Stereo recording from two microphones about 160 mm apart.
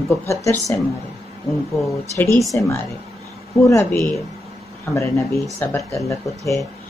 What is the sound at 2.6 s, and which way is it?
Speech, 15° left (ahead or behind).